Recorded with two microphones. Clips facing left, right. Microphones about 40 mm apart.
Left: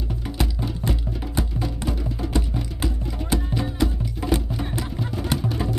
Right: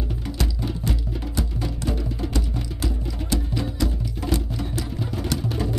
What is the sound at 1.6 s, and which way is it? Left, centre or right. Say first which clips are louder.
Music: even; centre.